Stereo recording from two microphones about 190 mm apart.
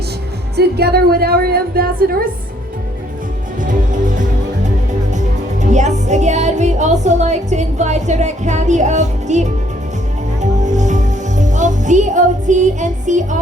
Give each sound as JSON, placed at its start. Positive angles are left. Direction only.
{"t": 0.5, "sound": "a woman's voice", "side_deg": -55}
{"t": 3.6, "sound": "music", "side_deg": -40}